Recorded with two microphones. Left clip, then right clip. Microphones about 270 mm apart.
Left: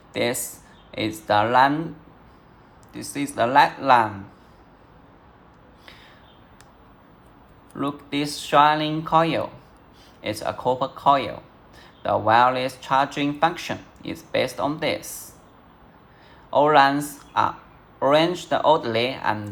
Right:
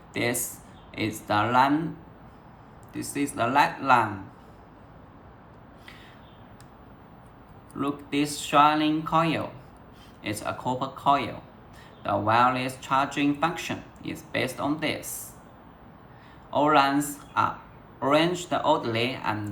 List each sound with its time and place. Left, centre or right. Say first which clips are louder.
0.1 s speech: left 4 dB; left
2.9 s speech: left 2 dB; left
7.8 s speech: left 1 dB; left
16.5 s speech: left 5 dB; left